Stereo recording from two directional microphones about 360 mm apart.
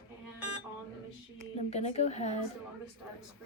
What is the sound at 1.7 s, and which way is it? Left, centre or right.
Speech, centre.